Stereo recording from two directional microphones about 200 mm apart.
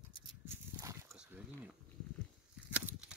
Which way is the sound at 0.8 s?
15° right (ahead or behind).